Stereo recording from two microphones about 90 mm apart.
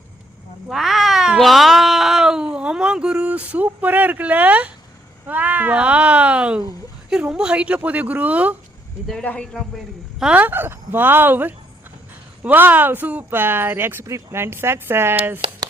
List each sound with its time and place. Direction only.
0.7 s cat: centre (ahead or behind)
5.2 s speech: 20° right (ahead or behind)
9.2 s a man's voice: 15° left (ahead or behind)
9.5 s a man's voice: centre (ahead or behind)
10.3 s speech: 20° right (ahead or behind)